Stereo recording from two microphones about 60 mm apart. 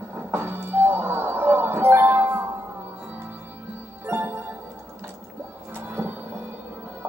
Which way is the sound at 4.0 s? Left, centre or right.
Right.